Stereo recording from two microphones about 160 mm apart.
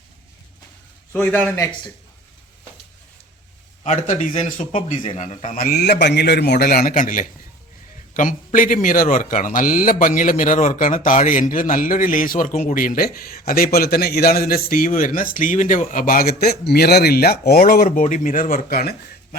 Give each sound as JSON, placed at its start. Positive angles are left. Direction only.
{"t": 1.1, "sound": "a man's voice", "side_deg": 15}
{"t": 3.8, "sound": "speech", "side_deg": 50}